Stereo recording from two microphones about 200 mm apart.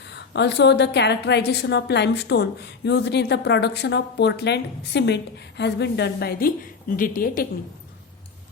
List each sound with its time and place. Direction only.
0.0 s a woman's voice: 60° left (ahead or behind)